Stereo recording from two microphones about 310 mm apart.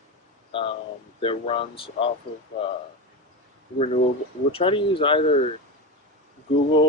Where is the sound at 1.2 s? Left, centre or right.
Centre.